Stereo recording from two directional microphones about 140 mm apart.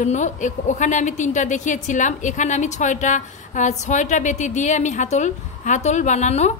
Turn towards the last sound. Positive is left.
turn(degrees=55)  # may be behind; listen again after turning